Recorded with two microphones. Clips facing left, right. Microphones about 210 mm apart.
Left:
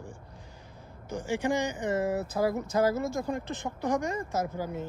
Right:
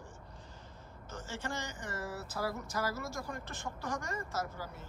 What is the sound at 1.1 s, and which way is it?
Speech, 15° left (ahead or behind).